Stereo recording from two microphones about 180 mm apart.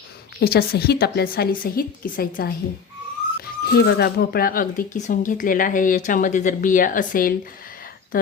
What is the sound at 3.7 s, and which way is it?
Speech, 65° left (ahead or behind).